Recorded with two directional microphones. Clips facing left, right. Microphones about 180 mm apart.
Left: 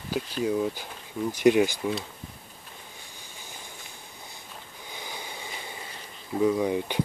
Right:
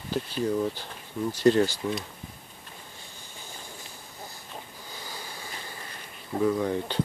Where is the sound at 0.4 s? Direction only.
10° left (ahead or behind).